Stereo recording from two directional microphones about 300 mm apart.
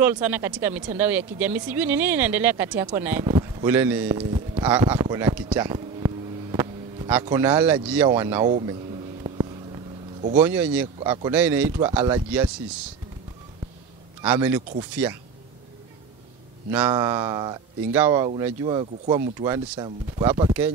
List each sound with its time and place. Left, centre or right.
0.0 s speech: centre
4.2 s a sound: centre
8.1 s speech: centre
10.3 s speech: centre
14.2 s speech: centre
16.7 s speech: centre